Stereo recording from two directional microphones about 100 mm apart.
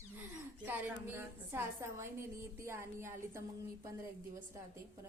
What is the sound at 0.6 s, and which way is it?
A woman's voice, 20° right (ahead or behind).